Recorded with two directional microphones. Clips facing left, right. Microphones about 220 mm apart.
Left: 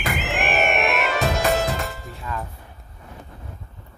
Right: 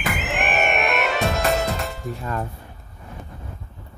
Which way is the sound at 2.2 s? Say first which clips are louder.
Right 2 dB; 45° right (ahead or behind).